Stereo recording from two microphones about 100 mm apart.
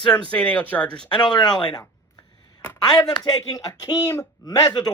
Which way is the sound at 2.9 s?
45° left (ahead or behind).